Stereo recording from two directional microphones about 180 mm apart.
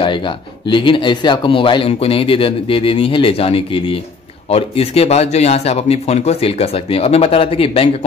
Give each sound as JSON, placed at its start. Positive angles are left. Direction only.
{"t": 0.0, "sound": "speech", "side_deg": 25}